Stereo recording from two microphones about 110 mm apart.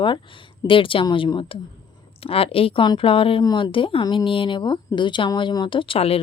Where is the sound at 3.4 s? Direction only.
45° left (ahead or behind).